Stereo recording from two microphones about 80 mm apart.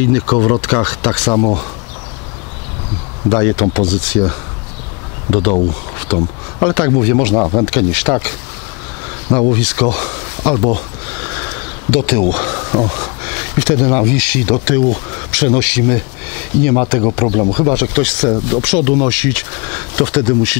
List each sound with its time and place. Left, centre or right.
0.0 s speech: centre
3.3 s speech: centre